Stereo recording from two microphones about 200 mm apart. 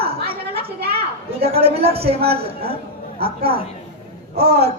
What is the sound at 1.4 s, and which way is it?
A woman's voice, 30° right (ahead or behind).